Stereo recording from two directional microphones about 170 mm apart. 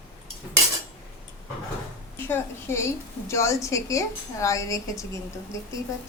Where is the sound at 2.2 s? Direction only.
15° left (ahead or behind).